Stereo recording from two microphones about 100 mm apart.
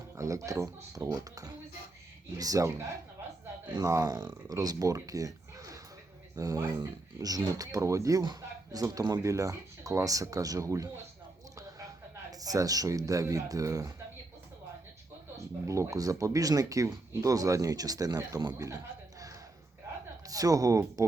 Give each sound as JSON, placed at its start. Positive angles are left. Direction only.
{"t": 0.2, "sound": "speech", "side_deg": -35}
{"t": 12.3, "sound": "speech", "side_deg": -35}
{"t": 15.6, "sound": "speech", "side_deg": -30}
{"t": 20.2, "sound": "speech", "side_deg": -35}